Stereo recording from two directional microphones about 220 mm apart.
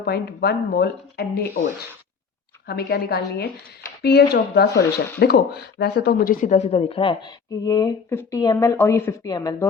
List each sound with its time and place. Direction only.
0.0 s speech: 45° left (ahead or behind)
2.6 s speech: 45° left (ahead or behind)
4.7 s speech: 15° left (ahead or behind)
5.2 s speech: 45° left (ahead or behind); by 9.6 s 15° left (ahead or behind)